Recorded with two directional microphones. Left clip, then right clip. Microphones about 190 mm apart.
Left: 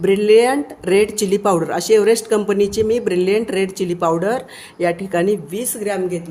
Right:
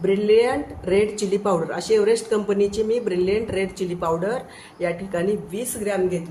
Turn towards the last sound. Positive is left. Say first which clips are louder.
# left 2 dB
turn(degrees=50)  # may be behind; listen again after turning